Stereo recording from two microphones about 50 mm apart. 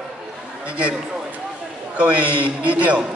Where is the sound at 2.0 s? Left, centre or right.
Right.